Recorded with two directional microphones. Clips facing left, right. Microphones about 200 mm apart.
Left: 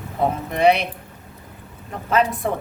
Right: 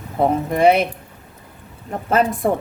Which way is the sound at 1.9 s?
45° right (ahead or behind).